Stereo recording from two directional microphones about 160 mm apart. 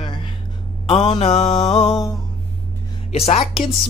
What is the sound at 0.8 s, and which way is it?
Speech, 35° left (ahead or behind).